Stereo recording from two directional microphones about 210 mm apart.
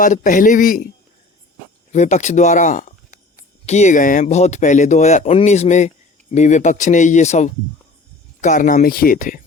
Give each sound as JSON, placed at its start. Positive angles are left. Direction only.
{"t": 0.0, "sound": "speech", "side_deg": 40}
{"t": 1.9, "sound": "speech", "side_deg": 35}